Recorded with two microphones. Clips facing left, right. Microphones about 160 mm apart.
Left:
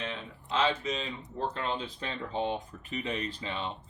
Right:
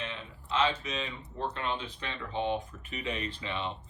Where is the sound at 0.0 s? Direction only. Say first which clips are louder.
Left 2 dB; 40° left (ahead or behind).